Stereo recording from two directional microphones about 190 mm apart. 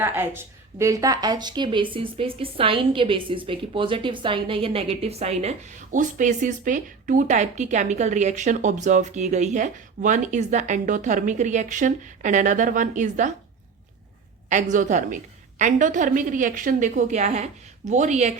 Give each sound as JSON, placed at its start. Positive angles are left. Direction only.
{"t": 0.0, "sound": "speech", "side_deg": -10}
{"t": 14.5, "sound": "speech", "side_deg": -40}